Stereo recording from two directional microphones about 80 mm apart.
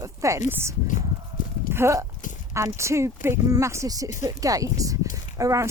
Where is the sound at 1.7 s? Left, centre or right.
Right.